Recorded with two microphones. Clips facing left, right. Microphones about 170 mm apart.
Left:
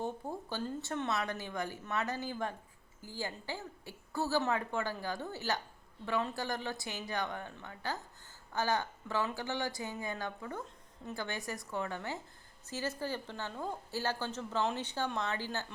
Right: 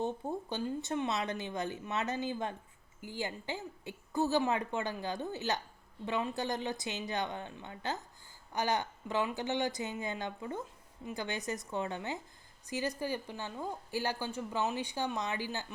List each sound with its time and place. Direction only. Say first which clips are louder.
0.0 s a woman's voice: right 3 dB; 20° right (ahead or behind)